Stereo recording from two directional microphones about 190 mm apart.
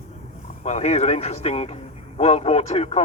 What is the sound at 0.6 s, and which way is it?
Speech, 35° left (ahead or behind).